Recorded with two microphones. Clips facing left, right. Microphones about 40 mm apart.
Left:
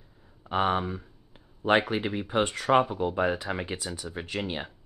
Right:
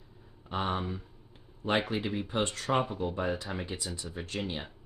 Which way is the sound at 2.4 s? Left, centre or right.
Centre.